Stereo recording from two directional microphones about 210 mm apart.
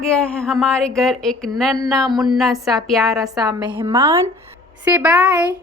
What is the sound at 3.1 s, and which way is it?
Speech, 15° right (ahead or behind).